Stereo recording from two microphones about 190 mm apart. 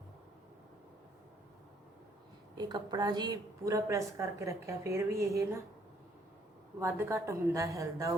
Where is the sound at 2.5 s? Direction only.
20° right (ahead or behind).